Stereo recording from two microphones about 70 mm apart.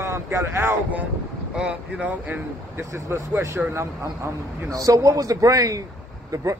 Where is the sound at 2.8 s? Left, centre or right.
Right.